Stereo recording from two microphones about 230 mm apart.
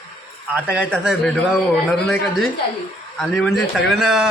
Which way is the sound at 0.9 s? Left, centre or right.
Centre.